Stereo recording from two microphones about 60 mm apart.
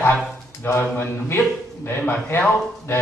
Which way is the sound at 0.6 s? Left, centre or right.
Left.